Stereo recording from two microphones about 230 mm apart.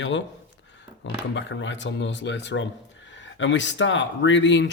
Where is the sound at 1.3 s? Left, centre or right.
Left.